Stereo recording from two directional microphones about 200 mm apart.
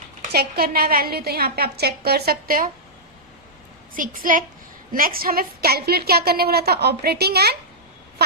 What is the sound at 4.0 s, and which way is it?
A woman's voice, 45° right (ahead or behind).